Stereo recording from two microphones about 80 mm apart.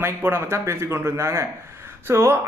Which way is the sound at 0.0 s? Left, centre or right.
Right.